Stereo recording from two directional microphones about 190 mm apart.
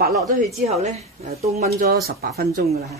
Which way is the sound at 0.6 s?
35° right (ahead or behind).